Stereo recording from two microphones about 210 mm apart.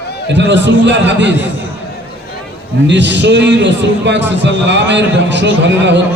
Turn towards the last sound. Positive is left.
turn(degrees=-55)  # may be behind; listen again after turning